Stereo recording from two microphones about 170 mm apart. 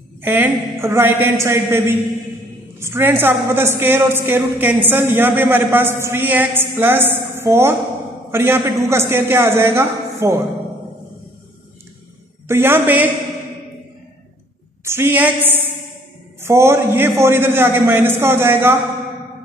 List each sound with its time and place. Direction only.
0.2 s a woman's voice: 10° right (ahead or behind)
12.4 s a woman's voice: 15° right (ahead or behind)
14.9 s a woman's voice: 15° right (ahead or behind)